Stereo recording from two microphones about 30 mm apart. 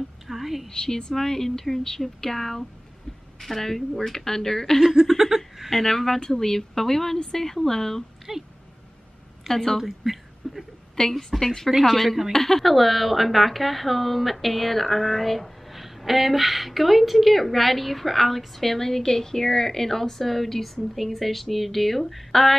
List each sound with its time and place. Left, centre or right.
0.3 s a sound: centre
0.7 s speech: left
1.1 s a woman's voice: centre
4.7 s laughter: centre
5.7 s a woman's voice: centre
8.3 s speech: centre
9.5 s a woman's voice: centre
9.8 s a sound: centre
11.0 s a woman's voice: centre
11.8 s a woman's voice: centre